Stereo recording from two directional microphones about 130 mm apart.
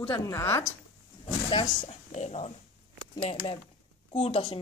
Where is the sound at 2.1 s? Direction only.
55° left (ahead or behind).